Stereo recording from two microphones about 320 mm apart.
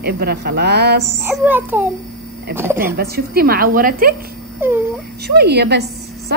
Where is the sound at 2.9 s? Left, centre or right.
Right.